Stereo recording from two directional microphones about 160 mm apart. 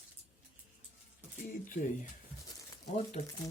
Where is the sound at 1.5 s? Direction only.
55° left (ahead or behind).